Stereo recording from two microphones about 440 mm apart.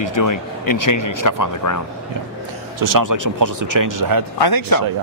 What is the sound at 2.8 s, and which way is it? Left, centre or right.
Speech, right.